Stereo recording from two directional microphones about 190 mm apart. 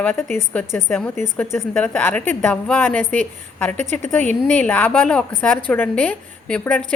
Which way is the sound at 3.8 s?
40° right (ahead or behind).